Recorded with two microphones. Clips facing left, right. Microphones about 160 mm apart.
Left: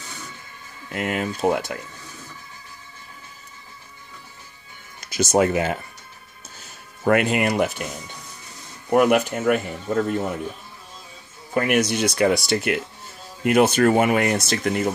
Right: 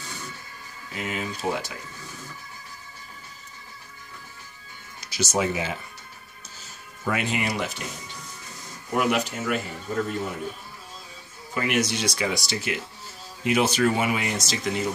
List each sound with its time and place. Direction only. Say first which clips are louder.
0.9 s speech: left 6 dB; 55° left (ahead or behind)
5.0 s speech: left 7 dB; 55° left (ahead or behind)
6.6 s music: left 8 dB; 55° left (ahead or behind)
8.9 s speech: left 7 dB; 50° left (ahead or behind)
11.5 s speech: left 5 dB; 55° left (ahead or behind)